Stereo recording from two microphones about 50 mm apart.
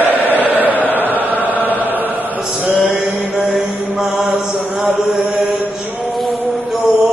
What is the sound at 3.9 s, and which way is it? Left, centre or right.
Chant, centre.